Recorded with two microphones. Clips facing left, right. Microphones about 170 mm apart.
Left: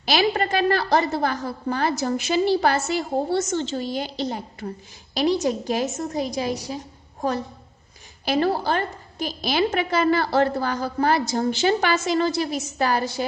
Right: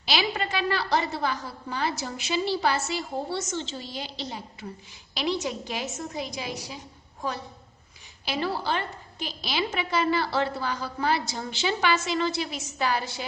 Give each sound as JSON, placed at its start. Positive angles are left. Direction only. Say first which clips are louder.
{"t": 0.0, "sound": "a woman's voice", "louder": "left 7 dB", "side_deg": 50}